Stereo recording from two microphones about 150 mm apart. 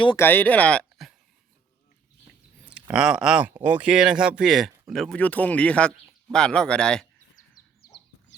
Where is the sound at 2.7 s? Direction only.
5° right (ahead or behind).